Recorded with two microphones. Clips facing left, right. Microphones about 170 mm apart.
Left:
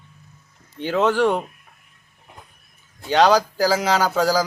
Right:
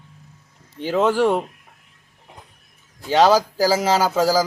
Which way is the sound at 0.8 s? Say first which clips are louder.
Right 1 dB; 5° right (ahead or behind).